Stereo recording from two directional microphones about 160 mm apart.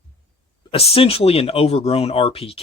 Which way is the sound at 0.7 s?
35° left (ahead or behind).